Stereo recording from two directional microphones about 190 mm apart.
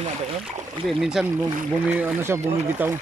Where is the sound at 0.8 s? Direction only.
Centre (ahead or behind).